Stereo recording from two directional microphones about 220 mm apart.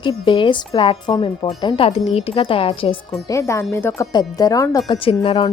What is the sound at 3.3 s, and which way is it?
Speech, 15° left (ahead or behind).